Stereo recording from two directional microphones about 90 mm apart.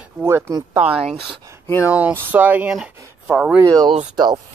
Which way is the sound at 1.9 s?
15° right (ahead or behind).